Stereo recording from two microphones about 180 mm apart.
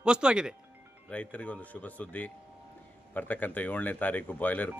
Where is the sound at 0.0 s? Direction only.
5° right (ahead or behind).